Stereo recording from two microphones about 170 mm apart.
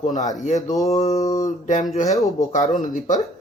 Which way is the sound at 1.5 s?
50° left (ahead or behind).